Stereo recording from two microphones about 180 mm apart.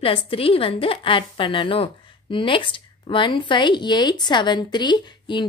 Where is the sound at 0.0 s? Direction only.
30° left (ahead or behind).